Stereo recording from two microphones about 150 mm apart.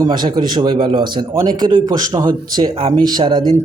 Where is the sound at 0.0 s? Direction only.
30° right (ahead or behind).